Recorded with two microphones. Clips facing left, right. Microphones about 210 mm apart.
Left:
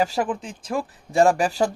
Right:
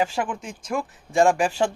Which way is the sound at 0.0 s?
35° left (ahead or behind).